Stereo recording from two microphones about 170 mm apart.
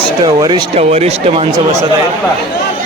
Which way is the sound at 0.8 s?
40° right (ahead or behind).